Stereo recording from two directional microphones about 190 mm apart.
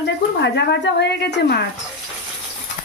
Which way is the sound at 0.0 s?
65° left (ahead or behind).